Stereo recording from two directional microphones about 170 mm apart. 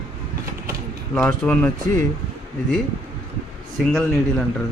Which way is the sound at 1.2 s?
10° left (ahead or behind).